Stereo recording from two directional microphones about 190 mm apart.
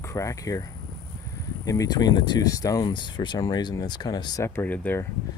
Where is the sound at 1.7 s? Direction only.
20° left (ahead or behind).